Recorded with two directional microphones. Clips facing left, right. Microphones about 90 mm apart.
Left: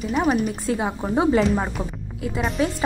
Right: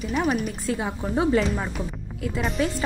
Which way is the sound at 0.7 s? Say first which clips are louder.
Left 3 dB; 25° left (ahead or behind).